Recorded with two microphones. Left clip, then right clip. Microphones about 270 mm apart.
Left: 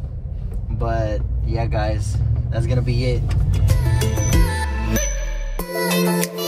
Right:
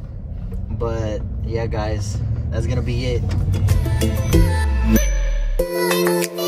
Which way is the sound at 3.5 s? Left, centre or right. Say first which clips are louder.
Left 1 dB; centre.